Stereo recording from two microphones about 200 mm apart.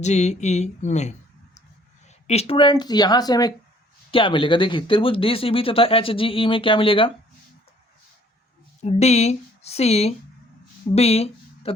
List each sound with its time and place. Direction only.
0.0 s speech: 35° left (ahead or behind)
2.2 s speech: 30° left (ahead or behind)
8.8 s speech: 30° left (ahead or behind)